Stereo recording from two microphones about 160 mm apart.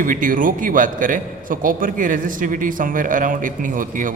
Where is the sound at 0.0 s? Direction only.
55° right (ahead or behind).